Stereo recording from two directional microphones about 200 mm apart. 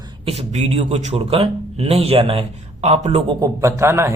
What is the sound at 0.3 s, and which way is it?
A man's voice, 35° right (ahead or behind).